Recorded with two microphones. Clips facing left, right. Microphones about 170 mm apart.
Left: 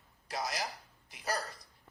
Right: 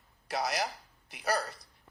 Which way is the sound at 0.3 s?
65° right (ahead or behind).